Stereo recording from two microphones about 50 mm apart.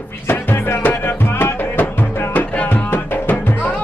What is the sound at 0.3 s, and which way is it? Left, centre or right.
Music, left.